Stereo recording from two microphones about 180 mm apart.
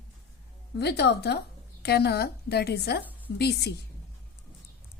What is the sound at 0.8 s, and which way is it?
A woman's voice, 65° left (ahead or behind).